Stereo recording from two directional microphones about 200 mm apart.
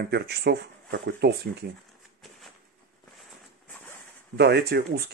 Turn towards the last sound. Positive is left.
turn(degrees=-55)  # may be behind; listen again after turning